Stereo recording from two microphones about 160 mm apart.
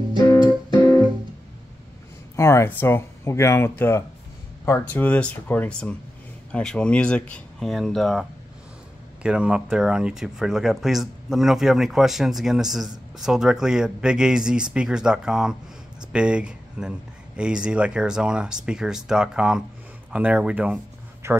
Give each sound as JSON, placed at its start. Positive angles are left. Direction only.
{"t": 2.3, "sound": "speech", "side_deg": 15}